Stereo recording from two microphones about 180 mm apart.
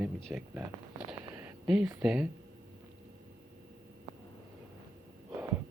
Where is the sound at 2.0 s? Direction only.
5° right (ahead or behind).